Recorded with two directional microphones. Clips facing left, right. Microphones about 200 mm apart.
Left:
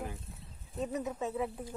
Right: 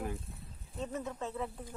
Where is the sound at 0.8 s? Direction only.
15° left (ahead or behind).